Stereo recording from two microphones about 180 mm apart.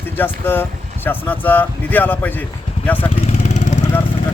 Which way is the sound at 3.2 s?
40° left (ahead or behind).